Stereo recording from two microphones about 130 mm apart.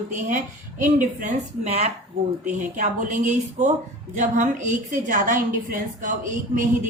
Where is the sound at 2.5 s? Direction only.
80° right.